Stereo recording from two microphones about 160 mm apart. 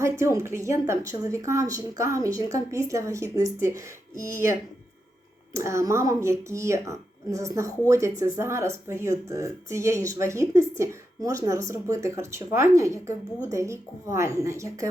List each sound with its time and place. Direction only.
0.0 s a woman's voice: 20° right (ahead or behind)
5.5 s a woman's voice: 20° right (ahead or behind)